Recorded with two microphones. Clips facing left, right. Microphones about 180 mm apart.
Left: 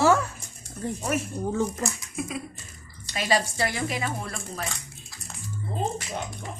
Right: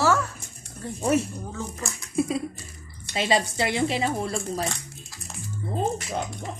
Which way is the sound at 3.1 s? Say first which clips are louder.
Right 2 dB; 25° right (ahead or behind).